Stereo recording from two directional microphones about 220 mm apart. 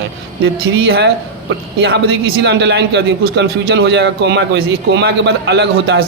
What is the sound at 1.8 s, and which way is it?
A man's voice, 50° right (ahead or behind).